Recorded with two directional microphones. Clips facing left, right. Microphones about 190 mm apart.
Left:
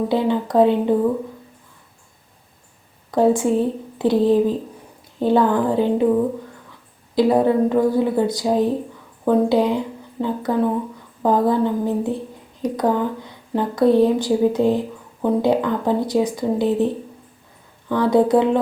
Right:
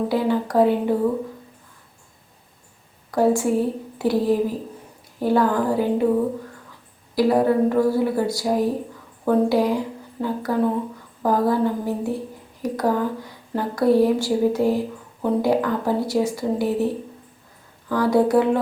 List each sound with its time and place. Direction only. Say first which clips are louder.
0.1 s a woman's voice: left 2 dB; 20° left (ahead or behind)
3.1 s a woman's voice: left 2 dB; 20° left (ahead or behind)
7.2 s a woman's voice: left 2 dB; 20° left (ahead or behind)
17.9 s a woman's voice: left 2 dB; 20° left (ahead or behind)